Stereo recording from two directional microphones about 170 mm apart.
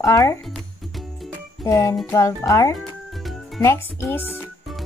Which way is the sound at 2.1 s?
20° left (ahead or behind).